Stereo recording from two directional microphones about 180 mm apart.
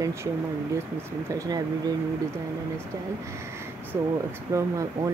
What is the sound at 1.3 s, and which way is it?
Speech, 20° right (ahead or behind).